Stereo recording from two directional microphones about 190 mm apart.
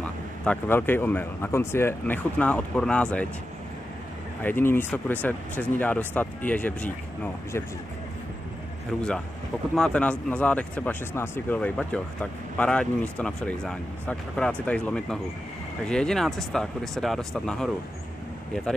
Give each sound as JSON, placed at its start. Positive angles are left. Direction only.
{"t": 0.0, "sound": "speech", "side_deg": 10}
{"t": 4.4, "sound": "speech", "side_deg": 10}
{"t": 9.8, "sound": "speech", "side_deg": 5}